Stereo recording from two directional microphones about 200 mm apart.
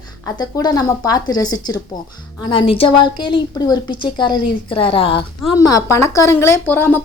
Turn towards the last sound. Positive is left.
turn(degrees=10)  # may be behind; listen again after turning